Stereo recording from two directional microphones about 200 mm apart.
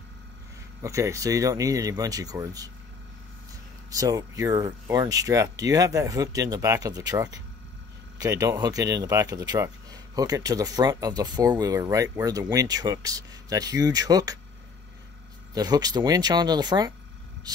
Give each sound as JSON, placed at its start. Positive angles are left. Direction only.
{"t": 0.8, "sound": "speech", "side_deg": -15}
{"t": 3.9, "sound": "speech", "side_deg": -15}
{"t": 15.5, "sound": "speech", "side_deg": -20}